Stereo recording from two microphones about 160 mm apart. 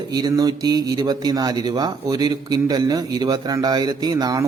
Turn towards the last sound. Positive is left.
turn(degrees=-25)  # may be behind; listen again after turning